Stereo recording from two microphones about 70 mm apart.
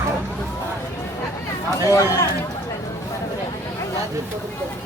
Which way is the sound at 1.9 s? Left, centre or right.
Left.